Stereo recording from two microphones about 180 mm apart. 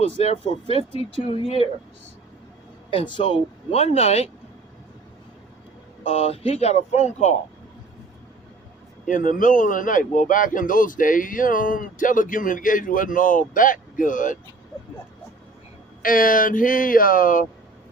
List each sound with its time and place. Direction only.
0.2 s speech: 35° left (ahead or behind)
2.9 s speech: 30° left (ahead or behind)
6.1 s speech: 35° left (ahead or behind)
9.0 s speech: 45° left (ahead or behind)
16.0 s speech: 50° left (ahead or behind)